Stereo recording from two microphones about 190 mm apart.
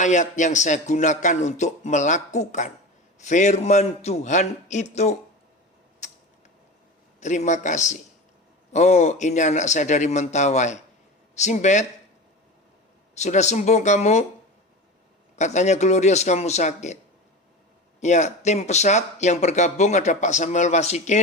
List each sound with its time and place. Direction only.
0.0 s speech: 40° left (ahead or behind)
7.2 s speech: 40° left (ahead or behind)
13.1 s speech: 35° left (ahead or behind)
15.4 s speech: 35° left (ahead or behind)
18.0 s speech: 40° left (ahead or behind)